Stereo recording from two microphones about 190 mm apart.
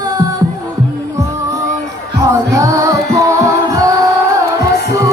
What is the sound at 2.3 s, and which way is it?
Music, 15° right (ahead or behind).